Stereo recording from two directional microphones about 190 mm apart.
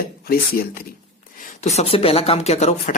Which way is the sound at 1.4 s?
35° left (ahead or behind).